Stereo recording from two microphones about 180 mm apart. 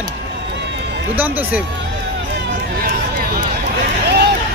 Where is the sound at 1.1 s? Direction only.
10° right (ahead or behind).